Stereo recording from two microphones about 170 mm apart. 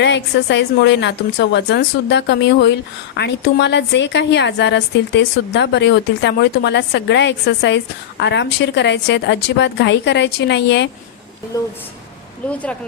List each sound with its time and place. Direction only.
0.0 s a woman's voice: 90° left
12.5 s speech: 5° left (ahead or behind)